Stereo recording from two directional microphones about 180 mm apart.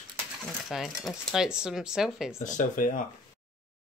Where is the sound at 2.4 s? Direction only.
45° left (ahead or behind).